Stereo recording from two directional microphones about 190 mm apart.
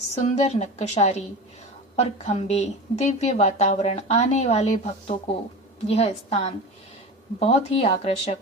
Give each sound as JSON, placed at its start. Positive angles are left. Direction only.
{"t": 0.1, "sound": "a woman's voice", "side_deg": 35}